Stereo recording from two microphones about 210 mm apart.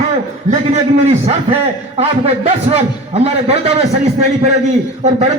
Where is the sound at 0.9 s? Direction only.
30° right (ahead or behind).